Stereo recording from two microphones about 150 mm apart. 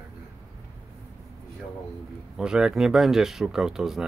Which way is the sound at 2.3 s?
5° right (ahead or behind).